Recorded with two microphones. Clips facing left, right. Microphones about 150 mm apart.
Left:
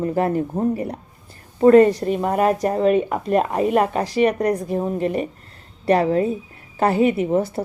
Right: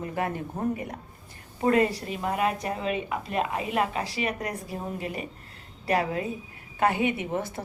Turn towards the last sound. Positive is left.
turn(degrees=35)  # may be behind; listen again after turning